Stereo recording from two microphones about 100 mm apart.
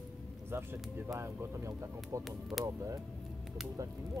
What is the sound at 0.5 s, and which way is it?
Speech, 25° right (ahead or behind).